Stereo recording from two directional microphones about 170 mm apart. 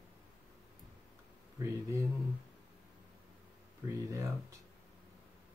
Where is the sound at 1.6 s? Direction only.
20° right (ahead or behind).